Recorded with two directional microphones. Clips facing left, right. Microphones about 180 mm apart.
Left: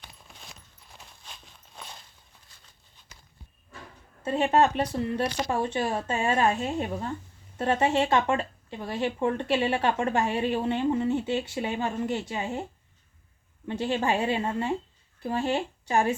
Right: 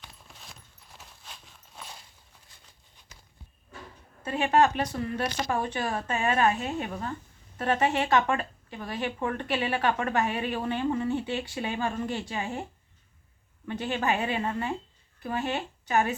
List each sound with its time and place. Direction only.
0.0 s clip-clop: centre (ahead or behind)
0.9 s a sound: 5° right (ahead or behind)
4.2 s speech: 30° left (ahead or behind)
13.7 s speech: 25° left (ahead or behind)